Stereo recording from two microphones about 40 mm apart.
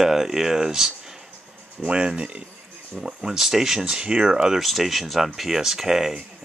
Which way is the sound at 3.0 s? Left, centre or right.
Centre.